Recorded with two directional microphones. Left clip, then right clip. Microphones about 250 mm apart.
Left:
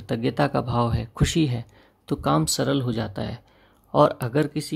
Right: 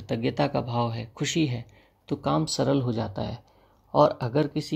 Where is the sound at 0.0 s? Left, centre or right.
Centre.